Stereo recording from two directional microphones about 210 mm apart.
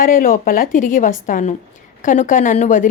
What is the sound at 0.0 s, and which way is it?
Speech, 40° left (ahead or behind).